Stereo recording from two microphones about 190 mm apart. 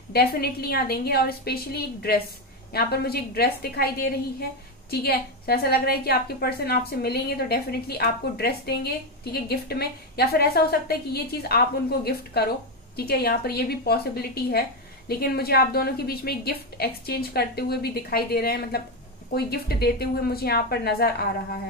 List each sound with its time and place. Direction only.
0.1 s a woman's voice: 55° left (ahead or behind)